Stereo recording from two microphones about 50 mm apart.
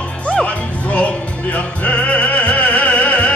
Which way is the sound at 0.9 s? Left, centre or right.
Left.